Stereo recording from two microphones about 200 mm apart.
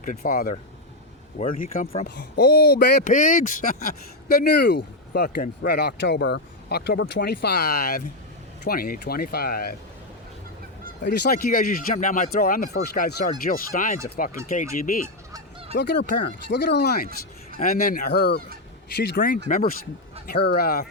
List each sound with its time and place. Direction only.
0.0 s speech: 45° left (ahead or behind)
2.0 s speech: 55° left (ahead or behind)
11.0 s speech: 55° left (ahead or behind)
15.7 s speech: 60° left (ahead or behind)